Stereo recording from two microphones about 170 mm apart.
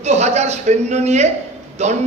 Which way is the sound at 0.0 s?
40° right (ahead or behind).